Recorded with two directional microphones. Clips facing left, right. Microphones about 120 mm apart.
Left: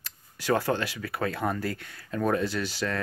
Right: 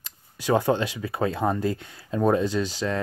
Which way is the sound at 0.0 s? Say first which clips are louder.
Right 4 dB; 20° right (ahead or behind).